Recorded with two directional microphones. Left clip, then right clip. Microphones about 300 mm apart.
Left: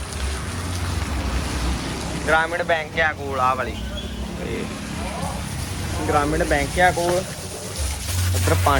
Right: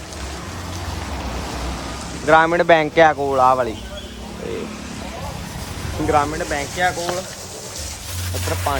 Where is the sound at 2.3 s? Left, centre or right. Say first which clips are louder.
Right 7 dB; centre.